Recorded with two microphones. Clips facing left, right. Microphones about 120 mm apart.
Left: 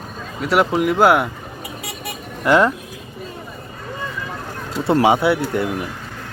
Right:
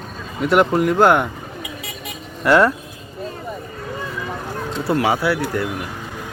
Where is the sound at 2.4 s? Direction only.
20° left (ahead or behind).